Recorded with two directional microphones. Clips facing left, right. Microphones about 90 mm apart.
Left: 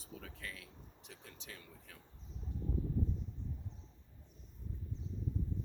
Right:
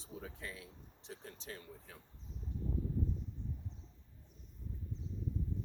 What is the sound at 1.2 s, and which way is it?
Speech, 35° right (ahead or behind).